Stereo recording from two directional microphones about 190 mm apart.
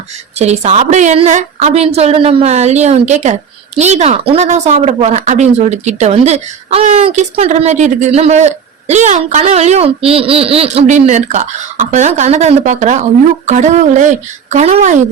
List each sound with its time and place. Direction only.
0.3 s speech: 35° right (ahead or behind)